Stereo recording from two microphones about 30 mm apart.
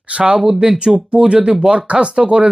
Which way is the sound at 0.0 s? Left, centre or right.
Right.